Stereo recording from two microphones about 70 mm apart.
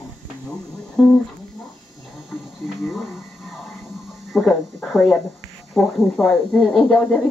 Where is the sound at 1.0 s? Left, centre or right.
Centre.